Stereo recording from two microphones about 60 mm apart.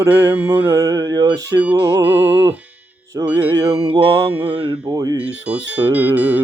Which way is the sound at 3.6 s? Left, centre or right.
Right.